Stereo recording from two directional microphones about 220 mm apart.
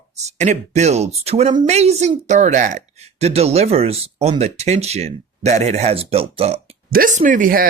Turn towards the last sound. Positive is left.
turn(degrees=-40)  # may be behind; listen again after turning